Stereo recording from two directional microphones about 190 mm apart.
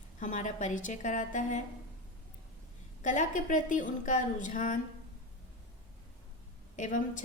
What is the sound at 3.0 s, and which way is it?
A woman's voice, 40° left (ahead or behind).